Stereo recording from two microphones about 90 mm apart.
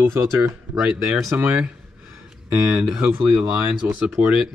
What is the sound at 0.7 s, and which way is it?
Speech, 10° right (ahead or behind).